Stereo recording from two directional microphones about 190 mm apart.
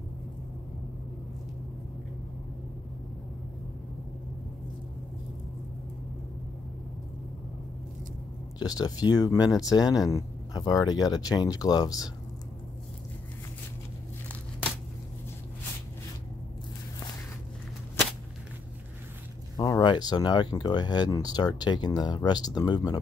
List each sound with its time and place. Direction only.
8.5 s speech: 20° left (ahead or behind)
19.5 s speech: 20° left (ahead or behind)